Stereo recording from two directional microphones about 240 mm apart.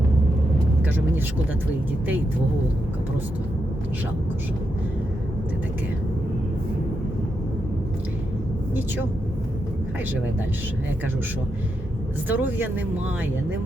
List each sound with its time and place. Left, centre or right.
0.8 s vehicle: centre
12.3 s speech: centre